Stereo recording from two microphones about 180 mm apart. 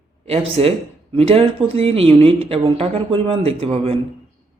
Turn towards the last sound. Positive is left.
turn(degrees=-35)  # may be behind; listen again after turning